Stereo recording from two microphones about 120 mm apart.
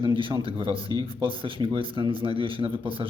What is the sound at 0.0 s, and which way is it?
Speech, 45° right (ahead or behind).